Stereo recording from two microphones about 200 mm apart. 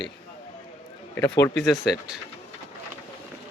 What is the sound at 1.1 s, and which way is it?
Speech, 10° left (ahead or behind).